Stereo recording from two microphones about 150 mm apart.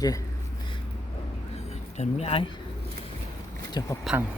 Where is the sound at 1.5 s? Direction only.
45° left (ahead or behind).